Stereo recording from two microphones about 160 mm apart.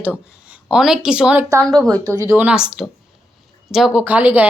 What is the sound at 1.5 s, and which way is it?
A woman's voice, 20° right (ahead or behind).